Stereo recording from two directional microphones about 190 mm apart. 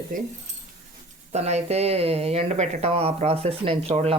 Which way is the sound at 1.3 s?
35° right (ahead or behind).